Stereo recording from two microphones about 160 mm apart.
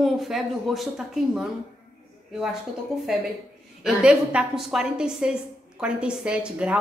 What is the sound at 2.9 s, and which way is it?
A woman's voice, centre (ahead or behind).